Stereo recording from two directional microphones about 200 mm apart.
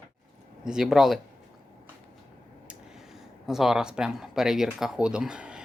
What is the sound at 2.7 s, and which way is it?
Speech, 5° right (ahead or behind).